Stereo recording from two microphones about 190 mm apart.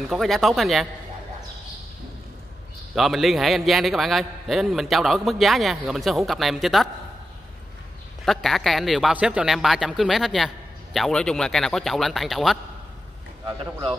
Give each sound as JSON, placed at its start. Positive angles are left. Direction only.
{"t": 0.1, "sound": "speech", "side_deg": 0}
{"t": 2.9, "sound": "speech", "side_deg": 0}
{"t": 8.3, "sound": "speech", "side_deg": 0}